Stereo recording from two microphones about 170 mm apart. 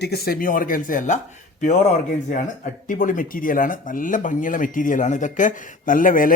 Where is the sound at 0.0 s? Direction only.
70° left (ahead or behind).